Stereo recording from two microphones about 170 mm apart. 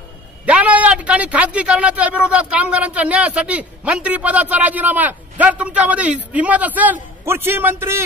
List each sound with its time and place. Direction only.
0.5 s speech: 10° right (ahead or behind)